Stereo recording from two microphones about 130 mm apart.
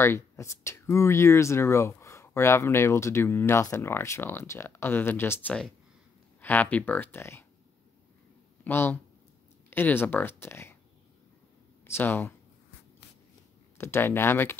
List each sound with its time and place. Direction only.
0.0 s speech: 20° left (ahead or behind)
8.6 s speech: 20° left (ahead or behind)
11.8 s speech: 20° left (ahead or behind)
13.7 s speech: 20° left (ahead or behind)